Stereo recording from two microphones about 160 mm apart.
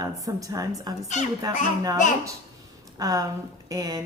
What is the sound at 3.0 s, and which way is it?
Speech, 25° right (ahead or behind).